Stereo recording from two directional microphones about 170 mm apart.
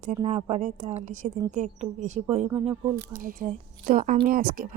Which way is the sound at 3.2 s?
55° right (ahead or behind).